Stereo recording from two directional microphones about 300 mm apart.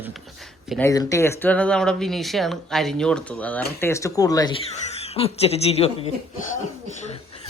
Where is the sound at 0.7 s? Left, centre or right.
Centre.